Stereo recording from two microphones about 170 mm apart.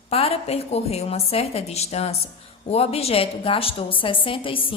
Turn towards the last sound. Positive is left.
turn(degrees=30)  # may be behind; listen again after turning